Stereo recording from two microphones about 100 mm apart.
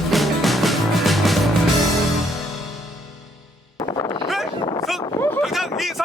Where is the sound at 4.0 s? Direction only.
45° left (ahead or behind).